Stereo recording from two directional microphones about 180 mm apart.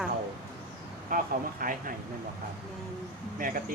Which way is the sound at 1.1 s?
50° right (ahead or behind).